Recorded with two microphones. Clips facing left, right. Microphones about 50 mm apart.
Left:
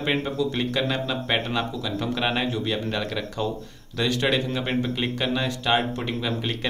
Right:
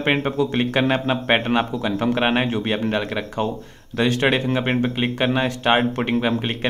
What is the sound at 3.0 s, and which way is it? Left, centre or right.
Speech, right.